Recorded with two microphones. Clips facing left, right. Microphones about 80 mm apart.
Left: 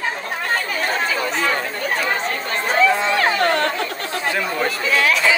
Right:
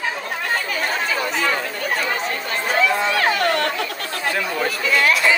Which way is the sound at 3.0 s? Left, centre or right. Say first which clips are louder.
Left 1 dB; left.